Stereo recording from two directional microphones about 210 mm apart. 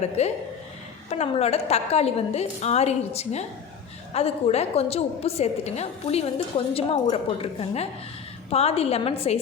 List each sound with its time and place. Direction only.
0.2 s a woman's voice: 30° left (ahead or behind)